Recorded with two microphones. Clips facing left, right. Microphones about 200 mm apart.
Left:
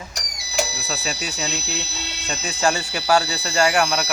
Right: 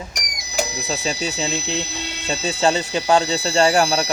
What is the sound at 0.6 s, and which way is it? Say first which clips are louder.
Speech: right 3 dB; 20° right (ahead or behind).